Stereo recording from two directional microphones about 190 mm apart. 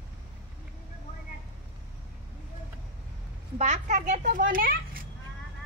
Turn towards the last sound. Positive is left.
turn(degrees=-50)  # may be behind; listen again after turning